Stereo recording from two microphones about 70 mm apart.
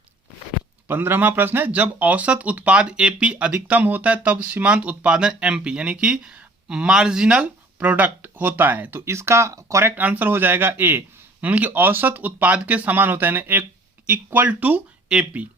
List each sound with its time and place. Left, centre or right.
0.9 s a man's voice: right
9.8 s a man's voice: right
15.1 s speech: centre